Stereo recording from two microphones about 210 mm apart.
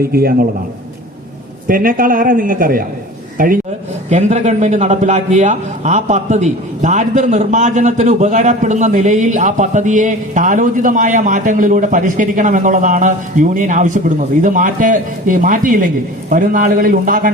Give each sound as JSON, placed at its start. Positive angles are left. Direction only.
{"t": 0.0, "sound": "a man's voice", "side_deg": -45}
{"t": 1.6, "sound": "a man's voice", "side_deg": -40}